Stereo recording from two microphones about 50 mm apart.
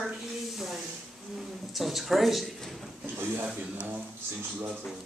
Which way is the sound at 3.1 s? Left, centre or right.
Right.